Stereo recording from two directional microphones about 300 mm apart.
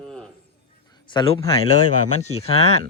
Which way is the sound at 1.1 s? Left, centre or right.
Centre.